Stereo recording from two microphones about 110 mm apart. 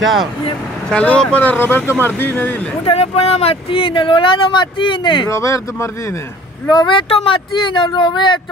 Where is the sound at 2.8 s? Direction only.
65° left (ahead or behind); by 5.3 s 45° left (ahead or behind).